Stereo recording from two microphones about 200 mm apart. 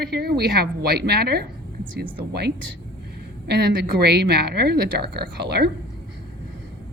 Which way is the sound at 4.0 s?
55° right (ahead or behind).